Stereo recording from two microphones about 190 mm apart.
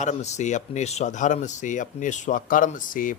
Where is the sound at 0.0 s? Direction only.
40° left (ahead or behind).